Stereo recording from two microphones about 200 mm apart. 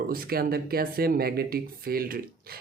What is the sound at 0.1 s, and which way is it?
Speech, 50° right (ahead or behind).